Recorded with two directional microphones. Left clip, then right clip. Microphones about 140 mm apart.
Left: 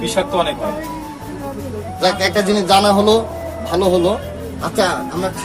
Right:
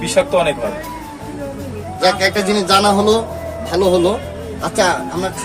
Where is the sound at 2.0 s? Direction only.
Centre (ahead or behind).